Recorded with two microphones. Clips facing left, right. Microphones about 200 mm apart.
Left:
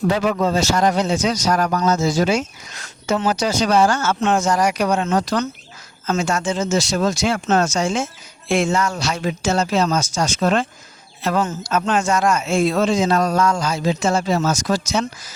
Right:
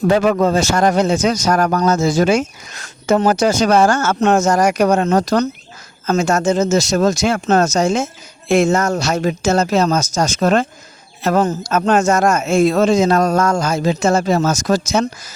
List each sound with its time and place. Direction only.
0.1 s a man's voice: 50° right (ahead or behind)